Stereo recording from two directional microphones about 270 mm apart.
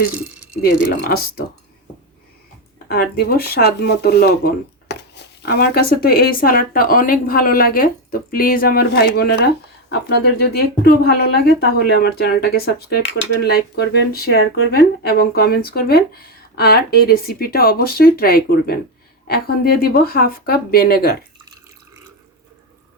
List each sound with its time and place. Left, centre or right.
0.9 s speech: left
2.7 s speech: left